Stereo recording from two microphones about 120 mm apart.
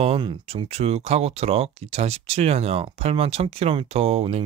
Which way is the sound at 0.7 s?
60° right (ahead or behind).